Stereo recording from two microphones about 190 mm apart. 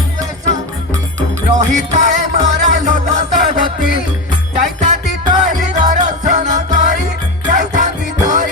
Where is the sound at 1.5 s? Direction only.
40° right (ahead or behind).